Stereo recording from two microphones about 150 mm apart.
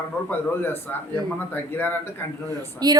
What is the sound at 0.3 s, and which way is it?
Speech, 15° left (ahead or behind).